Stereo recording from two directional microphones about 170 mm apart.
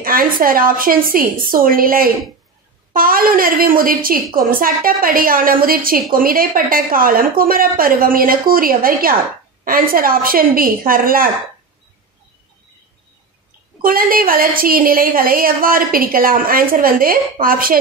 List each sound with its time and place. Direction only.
0.0 s a woman's voice: 55° right (ahead or behind)
13.8 s a woman's voice: 60° right (ahead or behind)